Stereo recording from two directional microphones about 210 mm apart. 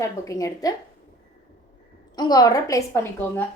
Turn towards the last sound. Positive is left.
turn(degrees=10)  # may be behind; listen again after turning